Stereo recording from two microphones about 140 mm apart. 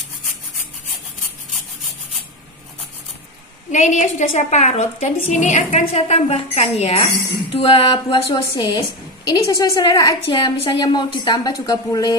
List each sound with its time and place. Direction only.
3.7 s a woman's voice: 60° left (ahead or behind); by 12.2 s 25° left (ahead or behind)